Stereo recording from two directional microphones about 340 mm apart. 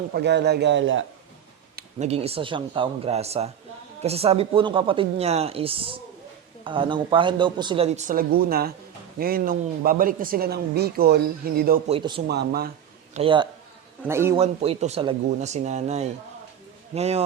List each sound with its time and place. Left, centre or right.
0.1 s a man's voice: right
1.7 s speech: centre
12.3 s speech: right
13.1 s speech: centre
14.4 s speech: centre